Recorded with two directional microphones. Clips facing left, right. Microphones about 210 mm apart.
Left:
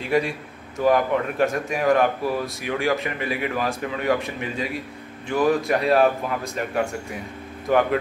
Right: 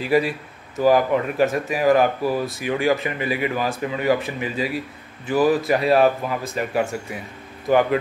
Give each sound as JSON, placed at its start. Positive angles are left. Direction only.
{"t": 0.0, "sound": "speech", "side_deg": -5}